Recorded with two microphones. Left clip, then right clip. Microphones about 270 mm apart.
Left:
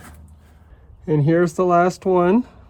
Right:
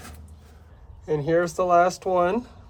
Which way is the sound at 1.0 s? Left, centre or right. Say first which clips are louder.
Left 4 dB; left.